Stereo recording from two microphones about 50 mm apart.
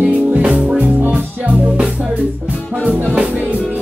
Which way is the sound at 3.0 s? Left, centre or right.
Right.